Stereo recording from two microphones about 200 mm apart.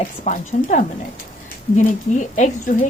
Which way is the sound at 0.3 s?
40° left (ahead or behind).